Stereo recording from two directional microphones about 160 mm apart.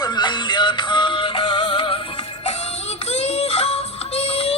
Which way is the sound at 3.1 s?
40° left (ahead or behind).